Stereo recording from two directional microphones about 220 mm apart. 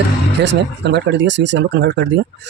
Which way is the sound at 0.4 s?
55° right (ahead or behind).